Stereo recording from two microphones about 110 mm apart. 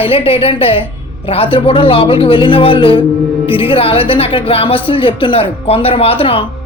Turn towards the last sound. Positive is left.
turn(degrees=55)  # may be behind; listen again after turning